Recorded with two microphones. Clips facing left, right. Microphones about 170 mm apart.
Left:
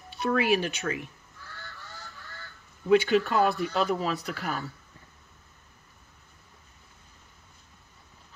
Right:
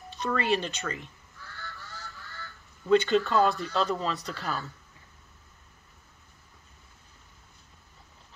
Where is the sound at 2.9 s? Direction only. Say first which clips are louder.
Left 1 dB; 15° left (ahead or behind).